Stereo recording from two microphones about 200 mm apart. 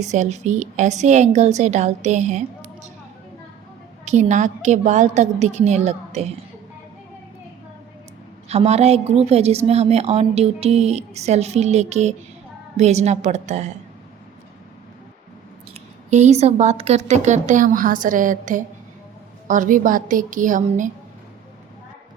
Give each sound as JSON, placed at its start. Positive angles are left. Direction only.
{"t": 0.0, "sound": "a woman's voice", "side_deg": -35}
{"t": 4.0, "sound": "a woman's voice", "side_deg": -35}
{"t": 8.4, "sound": "a woman's voice", "side_deg": -30}
{"t": 15.7, "sound": "a woman's voice", "side_deg": -35}